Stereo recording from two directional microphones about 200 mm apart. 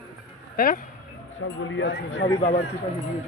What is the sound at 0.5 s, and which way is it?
Speech, 45° left (ahead or behind).